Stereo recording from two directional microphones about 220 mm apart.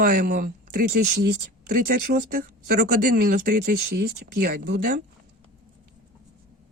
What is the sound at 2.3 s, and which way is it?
Speech, 40° right (ahead or behind).